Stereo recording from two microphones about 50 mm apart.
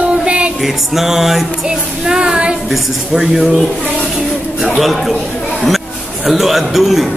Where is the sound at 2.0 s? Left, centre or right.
Centre.